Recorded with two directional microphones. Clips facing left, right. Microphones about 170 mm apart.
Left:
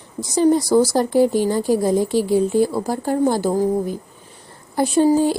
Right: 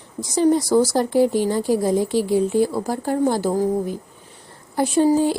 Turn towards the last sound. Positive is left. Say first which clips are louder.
# left 1 dB
turn(degrees=35)  # may be behind; listen again after turning